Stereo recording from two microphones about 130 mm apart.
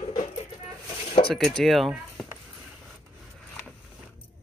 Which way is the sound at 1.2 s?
45° left (ahead or behind).